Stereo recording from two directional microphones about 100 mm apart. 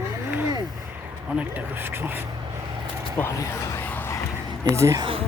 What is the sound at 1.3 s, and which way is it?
Speech, 20° right (ahead or behind).